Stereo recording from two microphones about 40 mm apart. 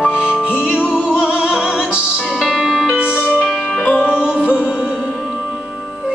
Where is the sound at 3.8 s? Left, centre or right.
Left.